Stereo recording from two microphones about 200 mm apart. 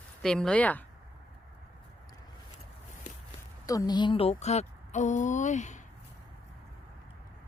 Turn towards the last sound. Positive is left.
turn(degrees=35)  # may be behind; listen again after turning